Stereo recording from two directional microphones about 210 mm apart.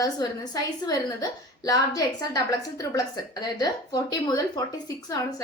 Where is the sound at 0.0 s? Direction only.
20° left (ahead or behind).